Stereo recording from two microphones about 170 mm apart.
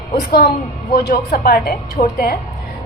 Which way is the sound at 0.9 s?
60° left (ahead or behind).